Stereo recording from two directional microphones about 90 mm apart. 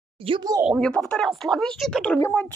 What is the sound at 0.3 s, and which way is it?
Speech, 90° right.